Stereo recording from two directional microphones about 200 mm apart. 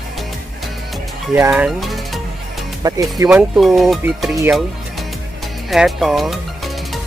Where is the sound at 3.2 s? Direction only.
Centre (ahead or behind).